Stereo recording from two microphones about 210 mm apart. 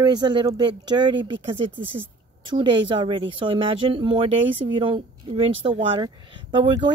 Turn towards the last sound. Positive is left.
turn(degrees=-25)  # may be behind; listen again after turning